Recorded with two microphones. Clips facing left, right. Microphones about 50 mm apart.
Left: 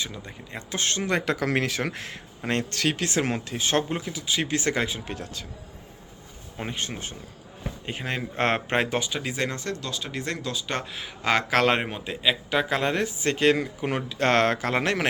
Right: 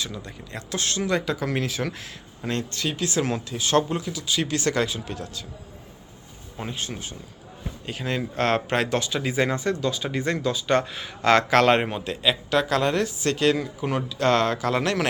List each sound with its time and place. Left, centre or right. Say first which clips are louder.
0.0 s speech: right 1 dB; centre
0.8 s speech: right 1 dB; left
5.0 s speech: right 1 dB; left
6.7 s speech: left 1 dB; left
7.9 s speech: right 3 dB; left
9.1 s speech: right 5 dB; centre; by 15.0 s left